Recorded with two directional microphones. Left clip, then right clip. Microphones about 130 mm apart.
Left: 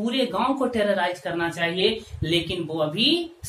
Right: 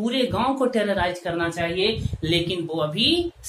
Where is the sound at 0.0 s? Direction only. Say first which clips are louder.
Right 1 dB; 35° right (ahead or behind).